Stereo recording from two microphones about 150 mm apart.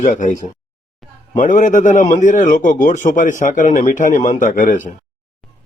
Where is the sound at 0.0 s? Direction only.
60° left (ahead or behind).